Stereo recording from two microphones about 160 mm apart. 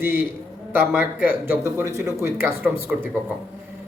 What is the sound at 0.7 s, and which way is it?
A man's voice, 10° right (ahead or behind).